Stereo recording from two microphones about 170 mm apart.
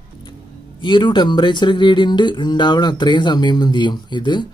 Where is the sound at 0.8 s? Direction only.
30° left (ahead or behind).